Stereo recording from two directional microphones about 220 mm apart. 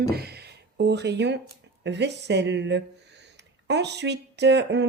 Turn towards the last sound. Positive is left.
turn(degrees=-50)  # may be behind; listen again after turning